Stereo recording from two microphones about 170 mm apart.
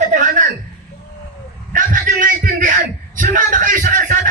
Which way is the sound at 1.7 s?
50° right (ahead or behind).